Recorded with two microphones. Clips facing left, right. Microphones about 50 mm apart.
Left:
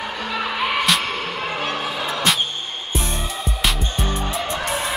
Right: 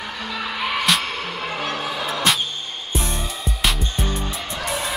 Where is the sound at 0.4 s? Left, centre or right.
Centre.